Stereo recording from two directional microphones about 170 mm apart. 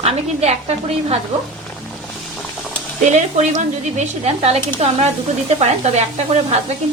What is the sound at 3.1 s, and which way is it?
A woman's voice, 45° right (ahead or behind).